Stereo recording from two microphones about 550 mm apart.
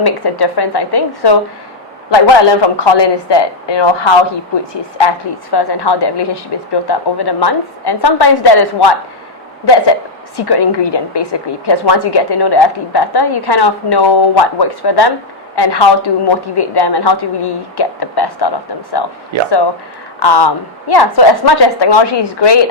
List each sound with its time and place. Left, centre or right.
0.0 s a woman's voice: left
10.3 s a woman's voice: left
20.1 s a woman's voice: left